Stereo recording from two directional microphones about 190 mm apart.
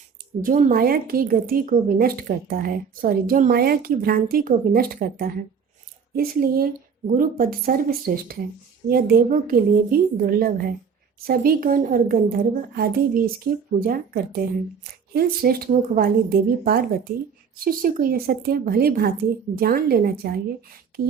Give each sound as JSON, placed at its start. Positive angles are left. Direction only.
{"t": 0.4, "sound": "a woman's voice", "side_deg": -45}